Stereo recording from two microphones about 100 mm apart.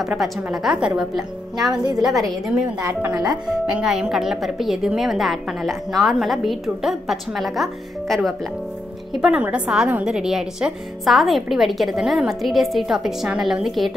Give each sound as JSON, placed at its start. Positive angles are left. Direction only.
{"t": 0.2, "sound": "a woman's voice", "side_deg": -5}
{"t": 3.1, "sound": "speech", "side_deg": -40}
{"t": 3.4, "sound": "a woman's voice", "side_deg": -5}
{"t": 9.2, "sound": "a woman's voice", "side_deg": -10}